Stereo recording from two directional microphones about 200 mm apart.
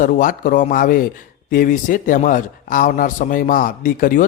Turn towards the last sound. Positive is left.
turn(degrees=40)  # may be behind; listen again after turning